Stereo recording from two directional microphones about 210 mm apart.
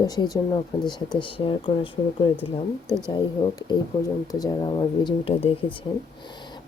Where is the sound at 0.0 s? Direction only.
20° left (ahead or behind).